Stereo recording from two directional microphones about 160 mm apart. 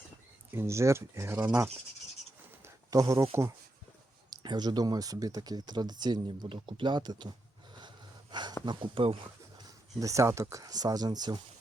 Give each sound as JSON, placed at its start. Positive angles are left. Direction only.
{"t": 0.5, "sound": "speech", "side_deg": -15}
{"t": 2.9, "sound": "speech", "side_deg": -20}
{"t": 4.3, "sound": "speech", "side_deg": -25}
{"t": 9.6, "sound": "speech", "side_deg": -20}